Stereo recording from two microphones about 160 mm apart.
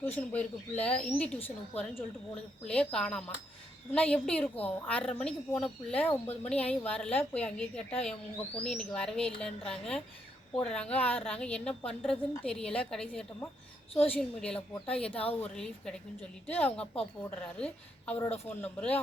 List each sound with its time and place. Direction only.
0.3 s speech: 10° left (ahead or behind)
13.9 s a woman's voice: 35° left (ahead or behind)
14.2 s speech: 5° left (ahead or behind)
15.1 s a woman's voice: 35° left (ahead or behind)
15.4 s speech: 5° left (ahead or behind)